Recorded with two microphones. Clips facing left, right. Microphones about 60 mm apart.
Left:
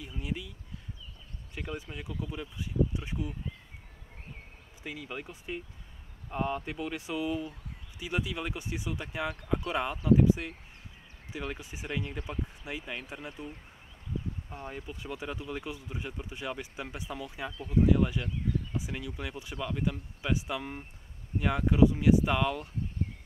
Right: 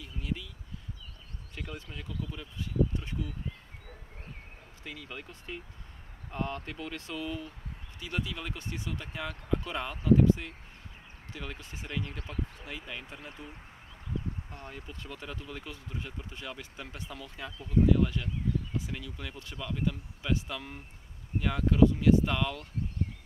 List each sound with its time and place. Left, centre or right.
0.0 s speech: centre
1.5 s speech: centre
4.8 s speech: centre
14.5 s speech: centre